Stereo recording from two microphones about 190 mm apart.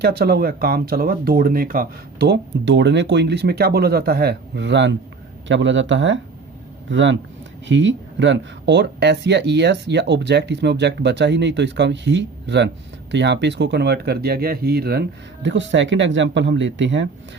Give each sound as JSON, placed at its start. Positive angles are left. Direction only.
{"t": 0.0, "sound": "speech", "side_deg": -55}
{"t": 15.4, "sound": "speech", "side_deg": -75}